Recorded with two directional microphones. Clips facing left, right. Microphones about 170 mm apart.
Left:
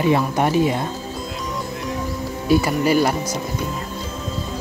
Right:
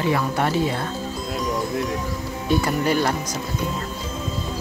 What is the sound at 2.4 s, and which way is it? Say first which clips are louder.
Speech: left 3 dB; 5° left (ahead or behind).